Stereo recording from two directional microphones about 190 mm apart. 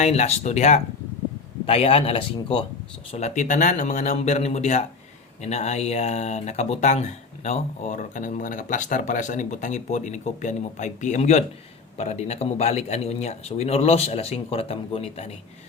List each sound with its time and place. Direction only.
0.0 s speech: 35° left (ahead or behind)